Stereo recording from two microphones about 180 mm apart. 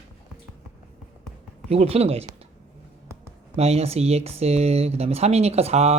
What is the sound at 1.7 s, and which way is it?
Speech, 35° right (ahead or behind).